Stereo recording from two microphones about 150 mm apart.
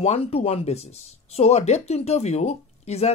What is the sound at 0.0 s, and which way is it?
Speech, 45° left (ahead or behind).